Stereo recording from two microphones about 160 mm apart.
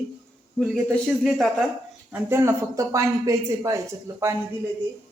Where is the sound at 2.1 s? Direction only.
15° right (ahead or behind).